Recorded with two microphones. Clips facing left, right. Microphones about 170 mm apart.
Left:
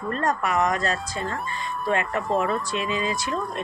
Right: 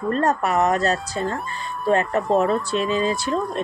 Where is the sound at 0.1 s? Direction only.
35° right (ahead or behind).